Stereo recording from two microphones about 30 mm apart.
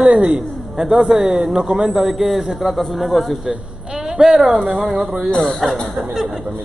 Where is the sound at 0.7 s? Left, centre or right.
Right.